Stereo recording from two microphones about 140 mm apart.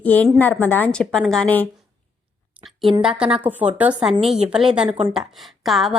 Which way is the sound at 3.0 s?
5° right (ahead or behind).